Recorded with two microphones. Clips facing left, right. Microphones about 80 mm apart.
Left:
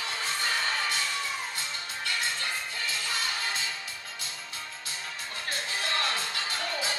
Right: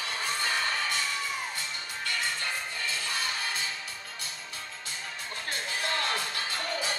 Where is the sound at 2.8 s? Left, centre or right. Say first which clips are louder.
Left 1 dB; centre.